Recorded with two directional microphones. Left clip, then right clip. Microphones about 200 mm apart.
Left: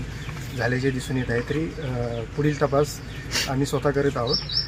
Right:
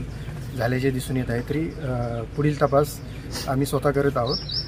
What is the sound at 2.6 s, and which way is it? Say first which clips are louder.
Speech: right 2 dB; 25° right (ahead or behind).